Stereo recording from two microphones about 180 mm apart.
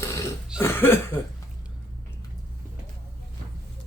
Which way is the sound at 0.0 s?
15° left (ahead or behind).